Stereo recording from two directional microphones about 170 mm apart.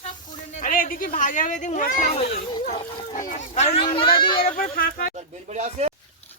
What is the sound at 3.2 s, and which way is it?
Speech, 45° left (ahead or behind).